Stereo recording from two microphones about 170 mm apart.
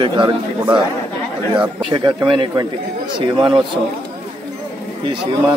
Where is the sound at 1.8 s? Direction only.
30° right (ahead or behind).